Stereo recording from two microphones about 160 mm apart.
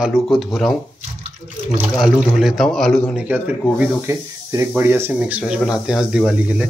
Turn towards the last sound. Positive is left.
turn(degrees=-10)  # may be behind; listen again after turning